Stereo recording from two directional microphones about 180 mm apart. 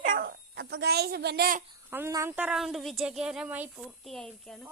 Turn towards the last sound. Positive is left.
turn(degrees=5)  # may be behind; listen again after turning